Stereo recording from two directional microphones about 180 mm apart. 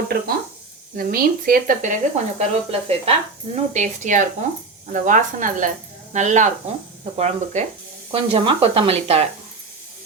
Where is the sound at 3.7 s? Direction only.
40° right (ahead or behind).